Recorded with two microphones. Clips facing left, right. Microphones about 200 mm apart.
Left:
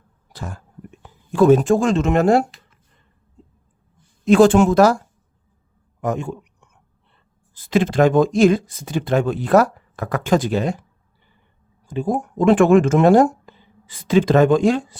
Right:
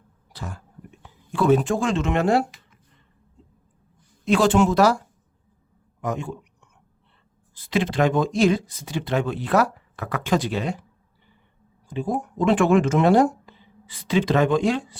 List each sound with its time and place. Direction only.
0.3 s a sound: 50° left (ahead or behind)
1.0 s speech: 45° left (ahead or behind)
4.3 s speech: 50° left (ahead or behind)
6.0 s speech: 50° left (ahead or behind)
7.5 s speech: 45° left (ahead or behind)
11.9 s speech: 45° left (ahead or behind)